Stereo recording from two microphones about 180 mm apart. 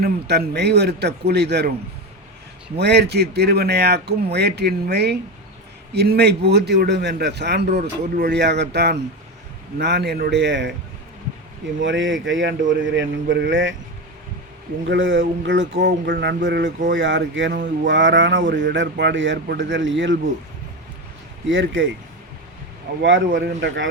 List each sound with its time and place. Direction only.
0.0 s a man's voice: 65° right (ahead or behind)
2.7 s a man's voice: 70° right (ahead or behind)
11.8 s mantra: 90° right
14.8 s speech: 85° right
15.4 s a man's voice: 75° right (ahead or behind)
21.4 s mantra: 90° right
22.9 s speech: 65° right (ahead or behind)
23.3 s speech: 80° right